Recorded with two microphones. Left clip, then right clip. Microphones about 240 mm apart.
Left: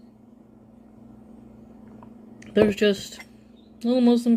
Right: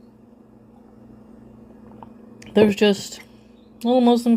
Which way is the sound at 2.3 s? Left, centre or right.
Right.